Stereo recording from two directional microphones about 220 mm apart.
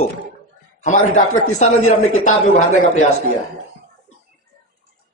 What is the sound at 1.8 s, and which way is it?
Speech, 75° left (ahead or behind).